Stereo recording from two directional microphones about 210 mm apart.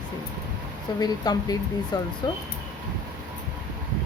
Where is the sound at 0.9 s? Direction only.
20° left (ahead or behind).